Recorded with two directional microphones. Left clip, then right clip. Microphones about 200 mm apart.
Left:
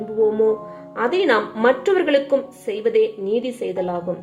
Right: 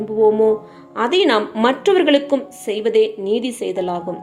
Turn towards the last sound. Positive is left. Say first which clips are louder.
# right 2 dB
turn(degrees=-40)  # may be behind; listen again after turning